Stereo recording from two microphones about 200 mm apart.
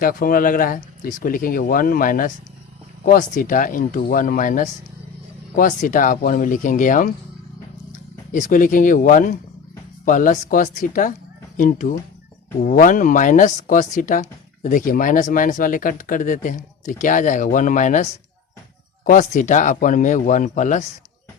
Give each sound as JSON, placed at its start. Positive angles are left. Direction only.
{"t": 0.0, "sound": "a woman's voice", "side_deg": 45}
{"t": 8.3, "sound": "a woman's voice", "side_deg": 40}